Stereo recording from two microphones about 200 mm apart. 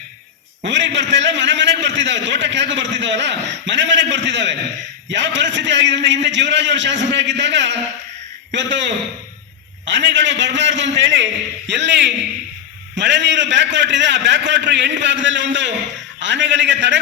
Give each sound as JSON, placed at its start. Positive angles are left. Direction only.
{"t": 0.6, "sound": "a man's voice", "side_deg": -65}